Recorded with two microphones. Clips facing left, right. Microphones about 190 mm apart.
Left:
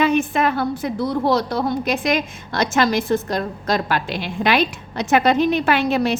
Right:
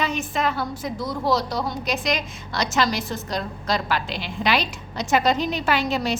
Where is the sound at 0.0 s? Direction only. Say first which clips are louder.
Left 7 dB; 55° left (ahead or behind).